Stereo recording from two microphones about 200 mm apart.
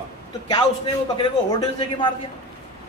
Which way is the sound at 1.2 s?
20° left (ahead or behind).